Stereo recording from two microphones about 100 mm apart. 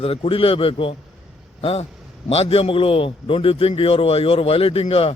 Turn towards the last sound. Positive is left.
turn(degrees=75)  # may be behind; listen again after turning